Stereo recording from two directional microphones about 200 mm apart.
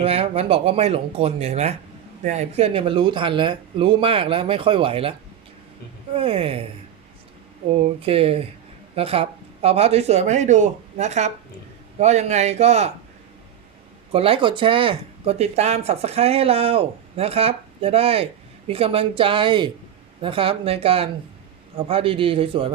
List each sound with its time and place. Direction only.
0.0 s speech: 30° right (ahead or behind)
6.1 s speech: 30° right (ahead or behind)
7.7 s speech: 30° right (ahead or behind)
14.1 s speech: 30° right (ahead or behind)